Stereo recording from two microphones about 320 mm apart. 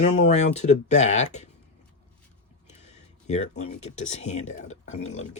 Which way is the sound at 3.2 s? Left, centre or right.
Left.